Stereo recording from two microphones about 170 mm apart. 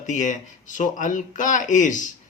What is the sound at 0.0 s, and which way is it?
Speech, 50° left (ahead or behind).